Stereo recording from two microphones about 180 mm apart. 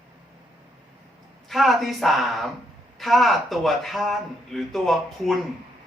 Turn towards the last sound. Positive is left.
turn(degrees=0)  # may be behind; listen again after turning